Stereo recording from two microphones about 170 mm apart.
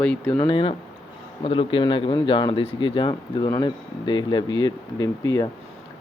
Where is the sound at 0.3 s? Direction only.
30° left (ahead or behind).